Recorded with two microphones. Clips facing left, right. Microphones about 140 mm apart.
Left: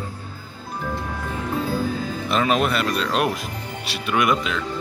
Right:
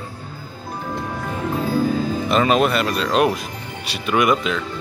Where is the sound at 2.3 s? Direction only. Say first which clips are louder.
Right 3 dB; centre (ahead or behind).